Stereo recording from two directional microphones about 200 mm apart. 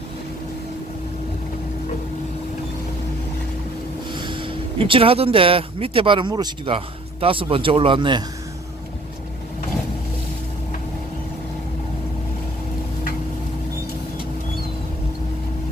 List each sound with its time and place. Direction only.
4.1 s speech: 25° right (ahead or behind)